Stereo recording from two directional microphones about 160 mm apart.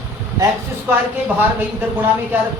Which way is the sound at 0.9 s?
15° right (ahead or behind).